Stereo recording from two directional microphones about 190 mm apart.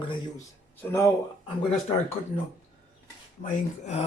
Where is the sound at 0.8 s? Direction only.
15° left (ahead or behind).